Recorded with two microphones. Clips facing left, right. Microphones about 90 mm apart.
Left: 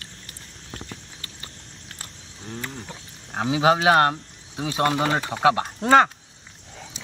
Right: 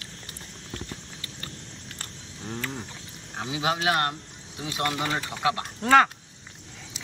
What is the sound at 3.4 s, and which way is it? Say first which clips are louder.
Speech: left 8 dB; 30° left (ahead or behind).